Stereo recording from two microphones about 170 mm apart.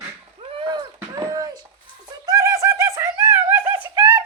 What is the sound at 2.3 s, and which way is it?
Bird, 20° right (ahead or behind).